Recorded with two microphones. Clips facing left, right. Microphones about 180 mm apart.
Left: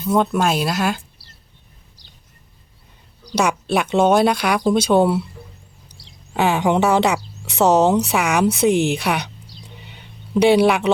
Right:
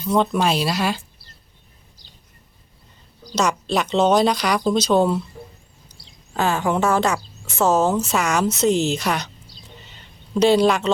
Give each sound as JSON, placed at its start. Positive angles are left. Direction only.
{"t": 0.0, "sound": "speech", "side_deg": 5}
{"t": 3.4, "sound": "speech", "side_deg": 10}
{"t": 6.3, "sound": "speech", "side_deg": 15}
{"t": 10.3, "sound": "speech", "side_deg": 10}